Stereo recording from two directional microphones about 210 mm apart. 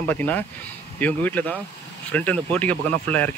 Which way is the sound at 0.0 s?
10° left (ahead or behind).